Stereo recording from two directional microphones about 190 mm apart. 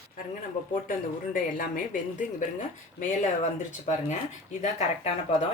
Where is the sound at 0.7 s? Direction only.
45° left (ahead or behind).